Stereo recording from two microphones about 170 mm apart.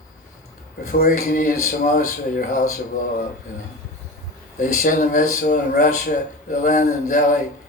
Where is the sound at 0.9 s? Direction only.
55° left (ahead or behind).